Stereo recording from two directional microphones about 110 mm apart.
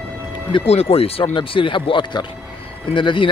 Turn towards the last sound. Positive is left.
turn(degrees=50)  # may be behind; listen again after turning